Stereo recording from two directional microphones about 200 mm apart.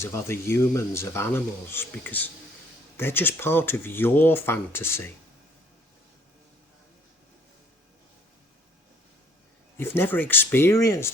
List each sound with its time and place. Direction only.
0.0 s speech: 15° left (ahead or behind)
9.7 s speech: 10° left (ahead or behind)